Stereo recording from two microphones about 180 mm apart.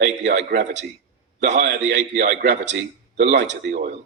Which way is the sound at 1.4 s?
45° right (ahead or behind).